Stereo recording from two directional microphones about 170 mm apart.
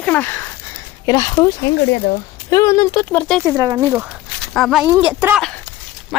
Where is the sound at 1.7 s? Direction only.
90° left.